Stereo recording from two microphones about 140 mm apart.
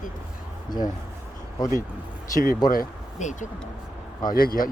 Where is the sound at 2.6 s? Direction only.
70° left (ahead or behind).